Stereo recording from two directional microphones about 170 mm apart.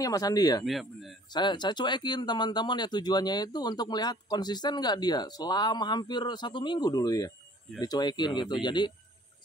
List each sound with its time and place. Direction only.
0.0 s speech: 20° left (ahead or behind)
0.7 s speech: centre (ahead or behind)
1.3 s speech: 25° left (ahead or behind)